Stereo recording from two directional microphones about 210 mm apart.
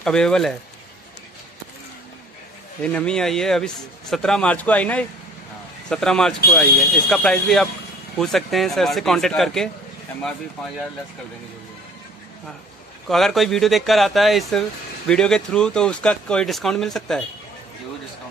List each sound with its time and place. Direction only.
0.0 s a man's voice: 5° left (ahead or behind)
2.8 s a man's voice: 5° left (ahead or behind)
13.1 s a man's voice: centre (ahead or behind)